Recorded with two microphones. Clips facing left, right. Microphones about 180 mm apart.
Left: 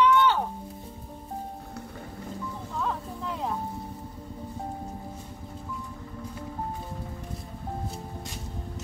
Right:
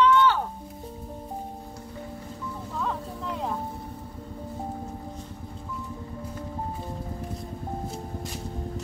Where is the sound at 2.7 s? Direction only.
Centre (ahead or behind).